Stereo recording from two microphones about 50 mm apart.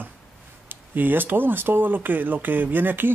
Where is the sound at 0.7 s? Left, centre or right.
Right.